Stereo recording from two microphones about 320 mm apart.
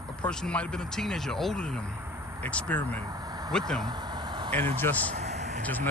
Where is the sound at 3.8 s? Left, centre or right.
Centre.